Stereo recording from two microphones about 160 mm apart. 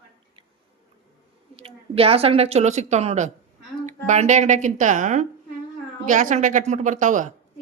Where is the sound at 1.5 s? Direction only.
35° right (ahead or behind).